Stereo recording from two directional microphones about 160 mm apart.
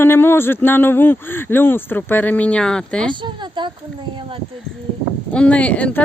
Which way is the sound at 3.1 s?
30° right (ahead or behind).